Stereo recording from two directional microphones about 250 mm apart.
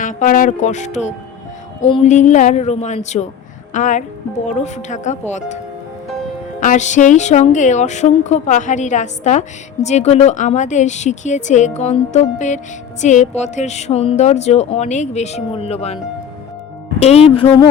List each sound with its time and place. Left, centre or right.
0.0 s speech: left
6.6 s speech: left
17.0 s speech: left